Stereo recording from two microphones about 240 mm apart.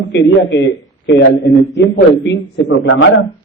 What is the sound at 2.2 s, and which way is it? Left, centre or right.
Speech, left.